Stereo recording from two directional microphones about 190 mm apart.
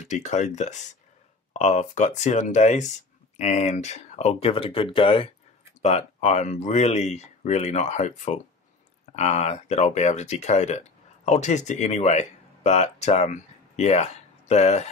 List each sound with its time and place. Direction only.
0.0 s speech: 40° left (ahead or behind)